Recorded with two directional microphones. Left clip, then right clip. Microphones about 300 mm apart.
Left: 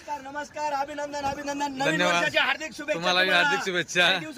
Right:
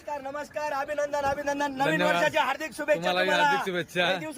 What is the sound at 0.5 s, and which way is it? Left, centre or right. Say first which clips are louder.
A man's voice: left 1 dB; centre.